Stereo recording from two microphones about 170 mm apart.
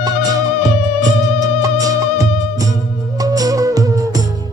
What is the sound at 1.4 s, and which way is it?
Music, 20° right (ahead or behind).